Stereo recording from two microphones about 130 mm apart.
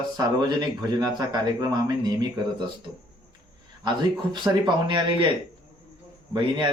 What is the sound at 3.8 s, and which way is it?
Speech, 35° right (ahead or behind).